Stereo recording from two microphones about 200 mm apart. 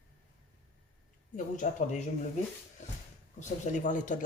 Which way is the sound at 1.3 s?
40° left (ahead or behind).